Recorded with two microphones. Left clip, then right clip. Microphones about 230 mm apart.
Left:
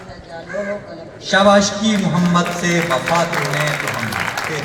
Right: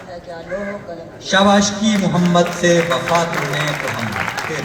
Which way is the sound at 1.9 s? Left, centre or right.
Right.